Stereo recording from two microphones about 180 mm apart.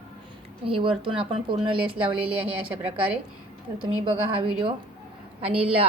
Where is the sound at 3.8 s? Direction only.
30° right (ahead or behind).